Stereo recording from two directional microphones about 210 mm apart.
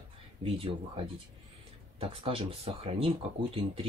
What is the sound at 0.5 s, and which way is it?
Speech, 25° right (ahead or behind).